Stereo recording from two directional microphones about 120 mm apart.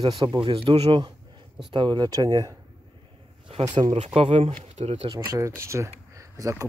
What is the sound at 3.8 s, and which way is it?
Speech, 70° right (ahead or behind).